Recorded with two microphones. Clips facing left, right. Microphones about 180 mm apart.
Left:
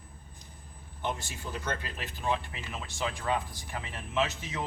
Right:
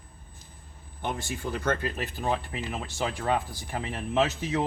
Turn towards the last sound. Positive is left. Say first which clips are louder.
# right 6 dB
turn(degrees=-35)  # may be behind; listen again after turning